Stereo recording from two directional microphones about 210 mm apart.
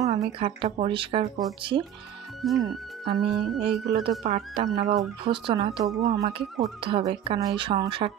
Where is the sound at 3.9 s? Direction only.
20° right (ahead or behind).